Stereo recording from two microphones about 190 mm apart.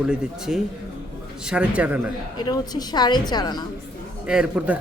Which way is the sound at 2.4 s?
20° left (ahead or behind).